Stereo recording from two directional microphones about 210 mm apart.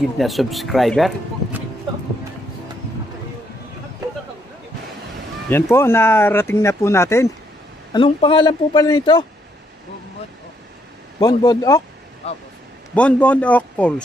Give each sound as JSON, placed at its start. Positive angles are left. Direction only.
{"t": 0.2, "sound": "speech", "side_deg": 0}
{"t": 5.5, "sound": "speech", "side_deg": 10}
{"t": 7.9, "sound": "speech", "side_deg": 25}
{"t": 11.1, "sound": "speech", "side_deg": 20}
{"t": 12.2, "sound": "speech", "side_deg": 30}
{"t": 12.9, "sound": "speech", "side_deg": 5}